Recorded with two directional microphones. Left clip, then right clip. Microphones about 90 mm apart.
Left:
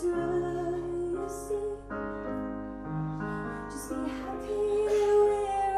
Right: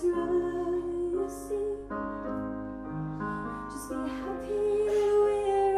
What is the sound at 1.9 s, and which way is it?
Music, 15° left (ahead or behind).